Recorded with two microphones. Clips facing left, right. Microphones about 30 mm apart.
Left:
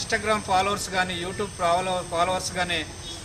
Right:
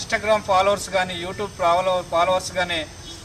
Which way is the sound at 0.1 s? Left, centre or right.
Centre.